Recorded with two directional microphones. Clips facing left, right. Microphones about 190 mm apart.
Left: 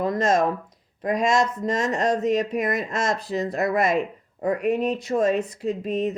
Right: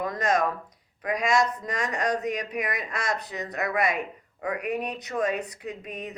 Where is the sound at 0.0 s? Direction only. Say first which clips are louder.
Left 5 dB; 25° left (ahead or behind).